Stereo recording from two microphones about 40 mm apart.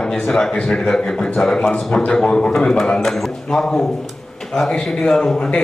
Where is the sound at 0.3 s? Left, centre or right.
Centre.